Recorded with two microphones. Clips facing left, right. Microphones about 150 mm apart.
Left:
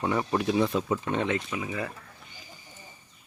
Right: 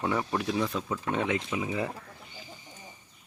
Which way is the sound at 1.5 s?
20° right (ahead or behind).